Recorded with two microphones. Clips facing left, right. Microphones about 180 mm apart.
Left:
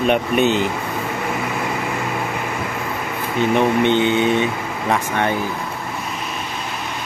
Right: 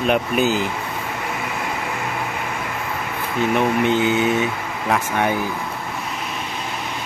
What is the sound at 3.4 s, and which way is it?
Speech, 5° right (ahead or behind).